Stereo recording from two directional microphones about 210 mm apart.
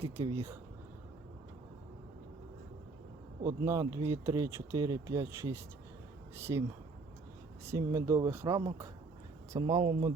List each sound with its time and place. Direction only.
0.0 s speech: 30° right (ahead or behind)
3.4 s speech: 15° right (ahead or behind)